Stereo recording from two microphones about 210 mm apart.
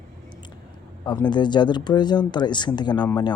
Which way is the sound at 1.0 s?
20° left (ahead or behind).